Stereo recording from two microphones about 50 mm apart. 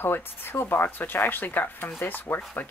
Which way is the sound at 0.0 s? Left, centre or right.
Left.